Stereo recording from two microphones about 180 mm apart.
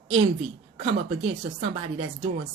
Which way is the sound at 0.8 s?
30° right (ahead or behind).